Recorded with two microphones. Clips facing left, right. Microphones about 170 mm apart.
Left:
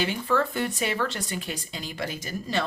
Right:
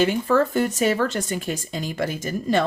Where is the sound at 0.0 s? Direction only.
45° right (ahead or behind).